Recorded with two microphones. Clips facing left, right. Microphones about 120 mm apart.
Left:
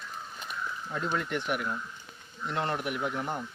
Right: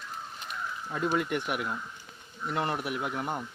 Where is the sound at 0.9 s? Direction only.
5° right (ahead or behind).